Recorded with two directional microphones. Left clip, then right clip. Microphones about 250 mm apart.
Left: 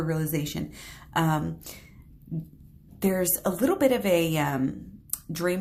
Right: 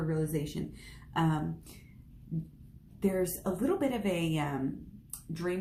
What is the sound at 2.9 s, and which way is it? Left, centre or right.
Speech, left.